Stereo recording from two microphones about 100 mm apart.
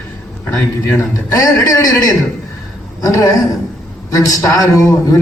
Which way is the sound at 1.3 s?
35° left (ahead or behind).